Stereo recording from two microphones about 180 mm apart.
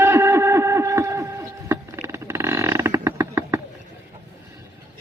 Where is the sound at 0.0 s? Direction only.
15° right (ahead or behind).